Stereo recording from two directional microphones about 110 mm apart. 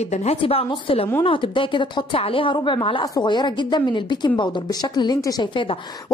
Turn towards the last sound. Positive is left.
turn(degrees=45)  # may be behind; listen again after turning